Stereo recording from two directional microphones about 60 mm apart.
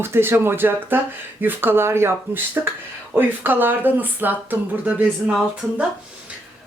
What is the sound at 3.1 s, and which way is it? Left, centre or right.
Speech, right.